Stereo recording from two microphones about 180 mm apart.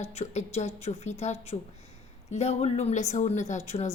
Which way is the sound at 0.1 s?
35° left (ahead or behind).